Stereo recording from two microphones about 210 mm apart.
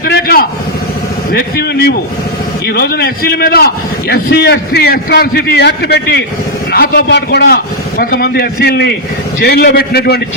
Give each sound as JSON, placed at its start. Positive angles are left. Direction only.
{"t": 0.0, "sound": "a man's voice", "side_deg": 45}